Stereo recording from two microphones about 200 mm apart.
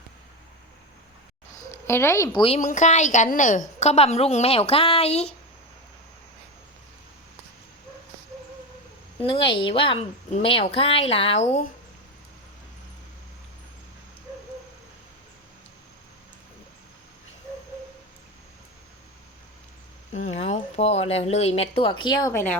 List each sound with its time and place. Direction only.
1.9 s a woman's voice: 15° left (ahead or behind); by 5.3 s 30° left (ahead or behind)
9.2 s a woman's voice: 25° left (ahead or behind)
20.1 s a woman's voice: 35° left (ahead or behind); by 22.5 s 15° left (ahead or behind)